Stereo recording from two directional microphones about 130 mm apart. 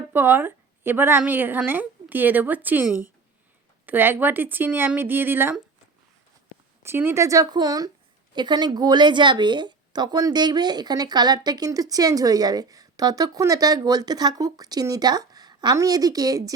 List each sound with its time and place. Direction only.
0.1 s a woman's voice: 15° right (ahead or behind)
6.8 s speech: 20° right (ahead or behind)